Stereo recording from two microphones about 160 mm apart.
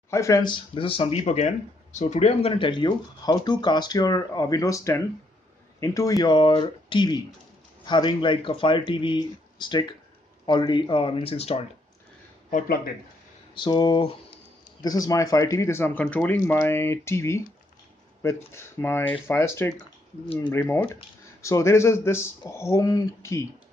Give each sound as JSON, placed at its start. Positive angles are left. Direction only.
{"t": 0.1, "sound": "speech", "side_deg": 20}
{"t": 12.4, "sound": "speech", "side_deg": 60}
{"t": 13.6, "sound": "speech", "side_deg": 25}